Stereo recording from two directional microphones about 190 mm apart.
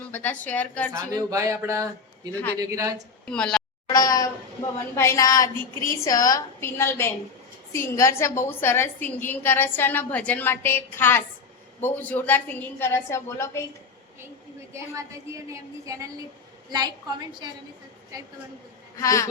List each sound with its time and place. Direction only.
0.1 s a woman's voice: 10° left (ahead or behind)
0.9 s a woman's voice: 15° right (ahead or behind)
2.3 s a woman's voice: 10° left (ahead or behind)
2.6 s a woman's voice: 15° right (ahead or behind)
3.2 s speech: 5° left (ahead or behind)
3.8 s a woman's voice: 20° left (ahead or behind)
14.7 s a woman's voice: 15° right (ahead or behind)
18.9 s a woman's voice: 15° left (ahead or behind)